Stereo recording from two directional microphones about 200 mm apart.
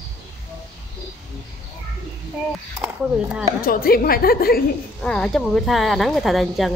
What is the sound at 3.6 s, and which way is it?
A woman's voice, 45° left (ahead or behind).